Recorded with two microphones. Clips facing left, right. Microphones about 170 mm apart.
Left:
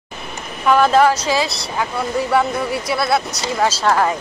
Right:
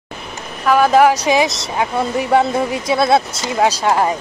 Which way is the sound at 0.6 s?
10° right (ahead or behind).